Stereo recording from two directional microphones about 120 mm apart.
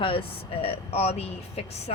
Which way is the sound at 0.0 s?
50° left (ahead or behind).